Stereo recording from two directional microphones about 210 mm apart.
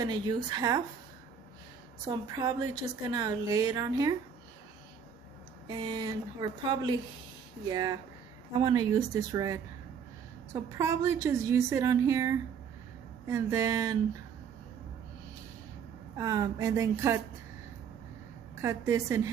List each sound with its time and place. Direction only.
0.0 s speech: 20° right (ahead or behind)
2.0 s speech: 20° right (ahead or behind)
5.7 s speech: 20° right (ahead or behind)
16.2 s speech: 15° right (ahead or behind)
18.6 s speech: 15° right (ahead or behind)